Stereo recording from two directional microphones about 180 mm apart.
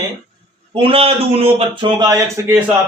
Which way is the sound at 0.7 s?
30° right (ahead or behind).